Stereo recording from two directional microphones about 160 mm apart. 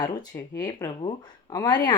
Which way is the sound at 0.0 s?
25° left (ahead or behind).